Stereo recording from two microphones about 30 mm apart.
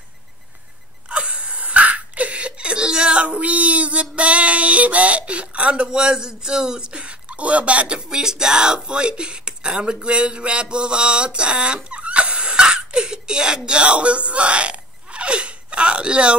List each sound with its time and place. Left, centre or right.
1.0 s a sound: right
5.9 s speech: right
8.1 s speech: right